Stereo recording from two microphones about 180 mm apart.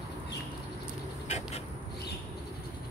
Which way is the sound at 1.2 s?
40° left (ahead or behind).